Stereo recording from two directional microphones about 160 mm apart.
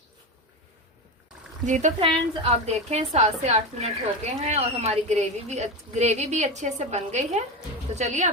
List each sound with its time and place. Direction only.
1.6 s a woman's voice: 50° right (ahead or behind)
2.0 s a woman's voice: 35° right (ahead or behind)